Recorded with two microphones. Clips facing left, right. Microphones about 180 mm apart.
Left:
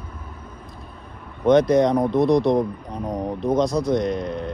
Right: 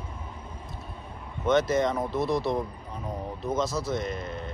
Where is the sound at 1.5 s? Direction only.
Centre (ahead or behind).